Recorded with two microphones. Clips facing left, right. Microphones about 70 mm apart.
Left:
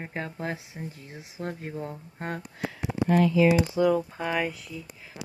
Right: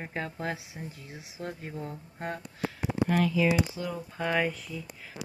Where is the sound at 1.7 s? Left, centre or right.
Left.